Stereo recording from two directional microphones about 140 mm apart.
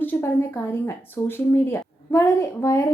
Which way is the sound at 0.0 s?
15° left (ahead or behind).